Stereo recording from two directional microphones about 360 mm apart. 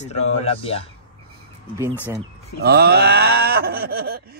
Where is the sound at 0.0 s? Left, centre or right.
Centre.